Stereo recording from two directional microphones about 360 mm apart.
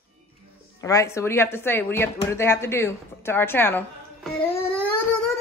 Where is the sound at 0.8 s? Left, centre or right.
Centre.